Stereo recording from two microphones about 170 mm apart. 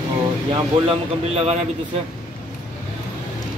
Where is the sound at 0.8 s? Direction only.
35° right (ahead or behind).